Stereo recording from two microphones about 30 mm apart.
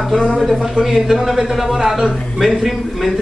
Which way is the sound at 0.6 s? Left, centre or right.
Centre.